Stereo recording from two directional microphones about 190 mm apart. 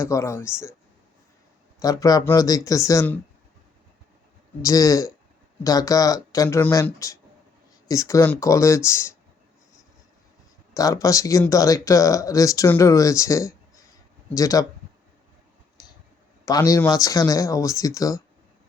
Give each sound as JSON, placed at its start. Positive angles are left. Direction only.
{"t": 0.0, "sound": "speech", "side_deg": 15}
{"t": 1.8, "sound": "speech", "side_deg": 20}
{"t": 4.6, "sound": "speech", "side_deg": 15}
{"t": 10.8, "sound": "speech", "side_deg": 15}
{"t": 16.5, "sound": "speech", "side_deg": 20}